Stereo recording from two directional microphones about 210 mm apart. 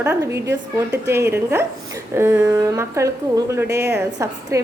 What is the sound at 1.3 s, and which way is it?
A woman's voice, 10° right (ahead or behind).